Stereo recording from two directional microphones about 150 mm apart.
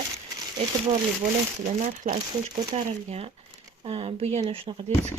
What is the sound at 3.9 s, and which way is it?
Speech, 40° right (ahead or behind).